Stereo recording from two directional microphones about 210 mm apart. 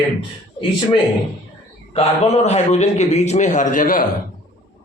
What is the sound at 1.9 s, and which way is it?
A man's voice, 30° left (ahead or behind).